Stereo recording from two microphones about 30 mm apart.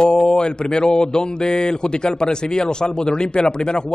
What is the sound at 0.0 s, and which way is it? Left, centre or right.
Speech, left.